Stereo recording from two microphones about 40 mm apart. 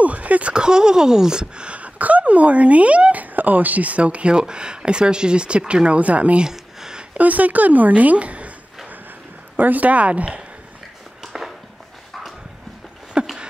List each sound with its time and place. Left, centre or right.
0.0 s speech: right; by 1.7 s centre
1.7 s speech: right
6.4 s a sound: centre
7.2 s speech: right
9.6 s speech: right
13.2 s a sound: right